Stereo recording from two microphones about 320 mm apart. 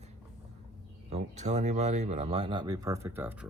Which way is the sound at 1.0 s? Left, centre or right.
Right.